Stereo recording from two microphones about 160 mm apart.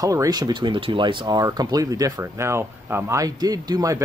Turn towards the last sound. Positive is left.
turn(degrees=-25)  # may be behind; listen again after turning